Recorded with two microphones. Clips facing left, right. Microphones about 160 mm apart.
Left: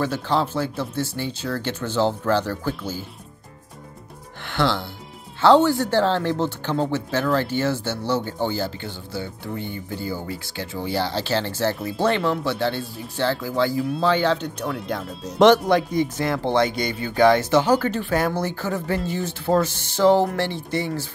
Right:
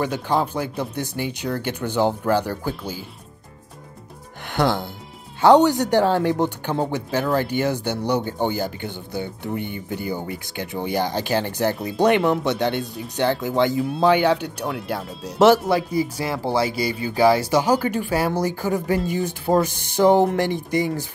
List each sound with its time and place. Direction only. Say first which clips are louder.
0.0 s speech: right 1 dB; 15° right (ahead or behind)
4.6 s speech: right 2 dB; 20° right (ahead or behind)